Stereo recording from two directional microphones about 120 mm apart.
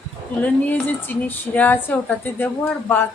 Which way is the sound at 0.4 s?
15° left (ahead or behind).